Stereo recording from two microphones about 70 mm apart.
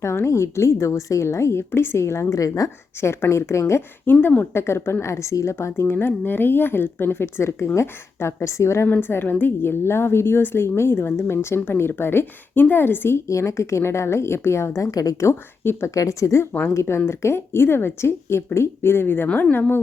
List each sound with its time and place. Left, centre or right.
0.0 s a woman's voice: left
3.0 s speech: left
4.0 s speech: left
8.9 s speech: left
15.3 s speech: left
16.0 s a woman's voice: left